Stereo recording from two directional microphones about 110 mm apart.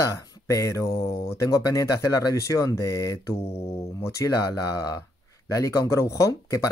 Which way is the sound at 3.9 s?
30° left (ahead or behind).